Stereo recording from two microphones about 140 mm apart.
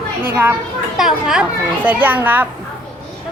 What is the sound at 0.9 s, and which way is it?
A woman's voice, 5° right (ahead or behind).